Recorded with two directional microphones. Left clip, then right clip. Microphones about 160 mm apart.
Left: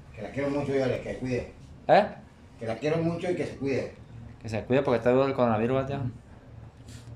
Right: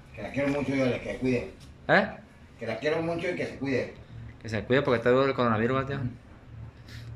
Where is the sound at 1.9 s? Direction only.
10° left (ahead or behind).